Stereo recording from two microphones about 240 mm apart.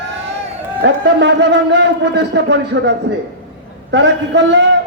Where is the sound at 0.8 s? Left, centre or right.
Right.